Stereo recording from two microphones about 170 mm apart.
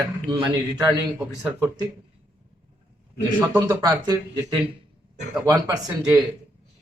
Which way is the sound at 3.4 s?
10° right (ahead or behind).